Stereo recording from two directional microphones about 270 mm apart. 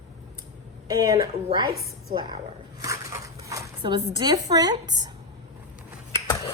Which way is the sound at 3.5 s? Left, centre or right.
Centre.